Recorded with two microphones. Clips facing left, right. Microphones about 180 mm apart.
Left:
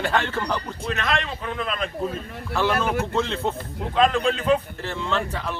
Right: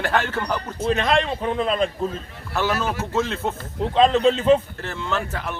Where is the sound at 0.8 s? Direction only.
30° right (ahead or behind).